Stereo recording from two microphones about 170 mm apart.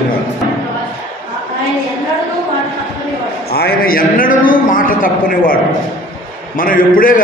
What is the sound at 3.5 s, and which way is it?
A man's voice, 65° left (ahead or behind).